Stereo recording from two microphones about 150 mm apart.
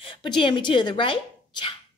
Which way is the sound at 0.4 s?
30° left (ahead or behind).